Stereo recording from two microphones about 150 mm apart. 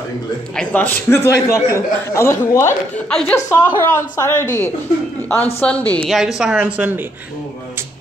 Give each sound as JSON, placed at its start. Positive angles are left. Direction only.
{"t": 0.6, "sound": "a man's voice", "side_deg": 10}
{"t": 3.1, "sound": "speech", "side_deg": 5}
{"t": 3.3, "sound": "a man's voice", "side_deg": 20}
{"t": 5.6, "sound": "a man's voice", "side_deg": 10}
{"t": 6.0, "sound": "speech", "side_deg": 0}